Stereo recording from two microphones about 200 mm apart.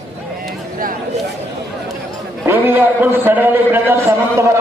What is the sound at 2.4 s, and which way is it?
A man's voice, 10° right (ahead or behind).